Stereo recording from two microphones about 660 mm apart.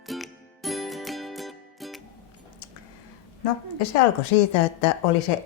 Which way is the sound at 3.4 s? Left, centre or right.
Left.